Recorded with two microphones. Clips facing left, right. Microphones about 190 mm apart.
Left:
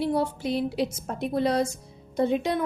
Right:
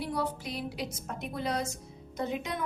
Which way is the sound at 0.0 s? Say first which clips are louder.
Left 8 dB; 25° left (ahead or behind).